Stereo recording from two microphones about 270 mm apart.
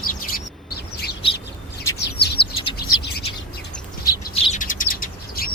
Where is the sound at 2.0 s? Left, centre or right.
Left.